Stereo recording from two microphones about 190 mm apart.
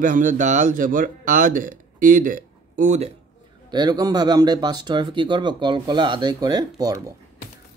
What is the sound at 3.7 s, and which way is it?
Speech, 20° right (ahead or behind).